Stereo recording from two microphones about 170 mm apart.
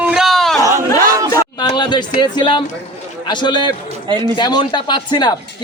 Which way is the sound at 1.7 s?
25° left (ahead or behind).